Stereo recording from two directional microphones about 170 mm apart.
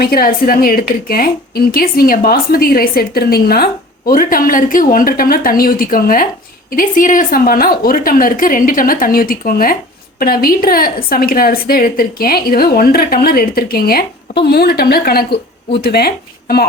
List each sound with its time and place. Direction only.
0.0 s a woman's voice: 60° left (ahead or behind)